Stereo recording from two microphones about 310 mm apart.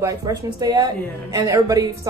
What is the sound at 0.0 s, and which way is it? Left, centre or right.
A woman's voice, centre.